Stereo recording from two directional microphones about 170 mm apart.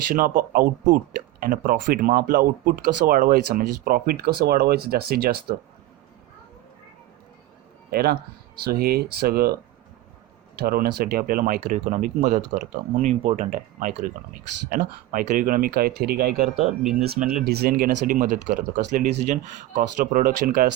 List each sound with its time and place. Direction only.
0.1 s speech: 55° right (ahead or behind)
7.9 s speech: 65° right (ahead or behind)
10.6 s speech: 65° right (ahead or behind)
16.6 s speech: centre (ahead or behind)
17.4 s speech: 65° right (ahead or behind)